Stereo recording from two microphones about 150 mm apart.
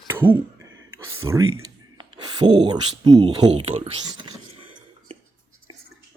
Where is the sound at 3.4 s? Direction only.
45° right (ahead or behind).